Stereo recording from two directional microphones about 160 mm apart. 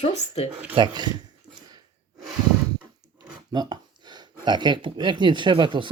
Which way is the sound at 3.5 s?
25° right (ahead or behind).